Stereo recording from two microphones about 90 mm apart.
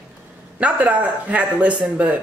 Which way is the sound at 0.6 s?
15° right (ahead or behind).